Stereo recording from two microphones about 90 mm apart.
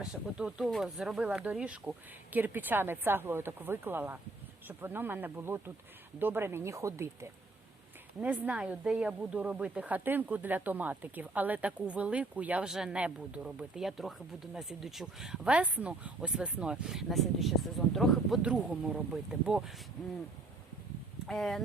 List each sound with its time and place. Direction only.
0.0 s speech: 10° right (ahead or behind); by 7.3 s 30° right (ahead or behind)
8.2 s speech: 15° right (ahead or behind); by 18.3 s centre (ahead or behind)
18.4 s speech: 10° right (ahead or behind)
21.2 s speech: 5° left (ahead or behind)